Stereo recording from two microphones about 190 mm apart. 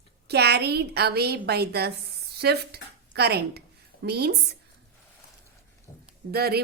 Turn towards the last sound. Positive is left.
turn(degrees=-55)  # may be behind; listen again after turning